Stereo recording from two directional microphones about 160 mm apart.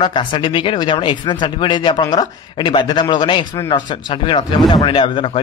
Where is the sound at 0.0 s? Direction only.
30° left (ahead or behind).